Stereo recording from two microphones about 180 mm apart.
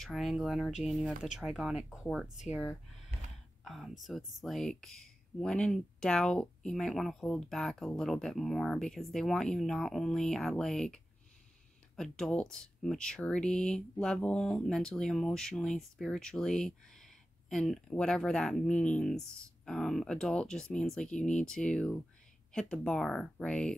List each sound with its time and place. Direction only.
0.0 s speech: centre (ahead or behind)
3.6 s speech: centre (ahead or behind)
12.0 s speech: 5° left (ahead or behind)